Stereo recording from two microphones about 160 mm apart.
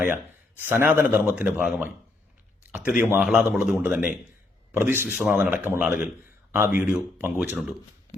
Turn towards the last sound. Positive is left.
turn(degrees=-10)  # may be behind; listen again after turning